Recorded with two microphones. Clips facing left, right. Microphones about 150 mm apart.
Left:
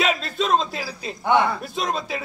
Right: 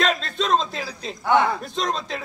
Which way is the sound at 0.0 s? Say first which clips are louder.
Even; 5° left (ahead or behind).